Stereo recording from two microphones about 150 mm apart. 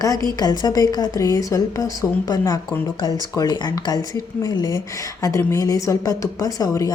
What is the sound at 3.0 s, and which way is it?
A woman's voice, 25° left (ahead or behind).